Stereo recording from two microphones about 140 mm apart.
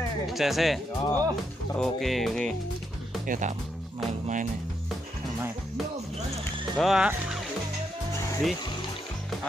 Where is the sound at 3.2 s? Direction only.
65° right (ahead or behind).